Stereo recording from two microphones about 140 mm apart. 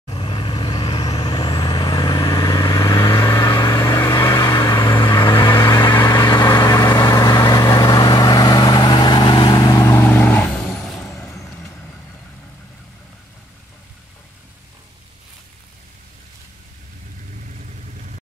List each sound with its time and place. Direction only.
0.1 s vehicle: 35° left (ahead or behind)
10.0 s vehicle: 15° left (ahead or behind)
11.2 s vehicle: 15° left (ahead or behind)